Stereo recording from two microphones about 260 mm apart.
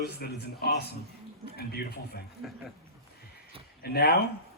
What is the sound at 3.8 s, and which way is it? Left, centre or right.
Speech, left.